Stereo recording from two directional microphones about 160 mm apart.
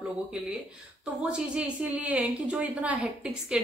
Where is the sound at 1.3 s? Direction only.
5° right (ahead or behind).